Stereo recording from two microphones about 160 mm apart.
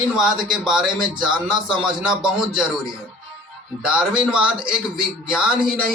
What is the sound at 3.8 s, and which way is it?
Speech, 5° right (ahead or behind).